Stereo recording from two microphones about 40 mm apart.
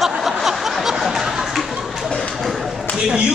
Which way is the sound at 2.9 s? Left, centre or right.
Right.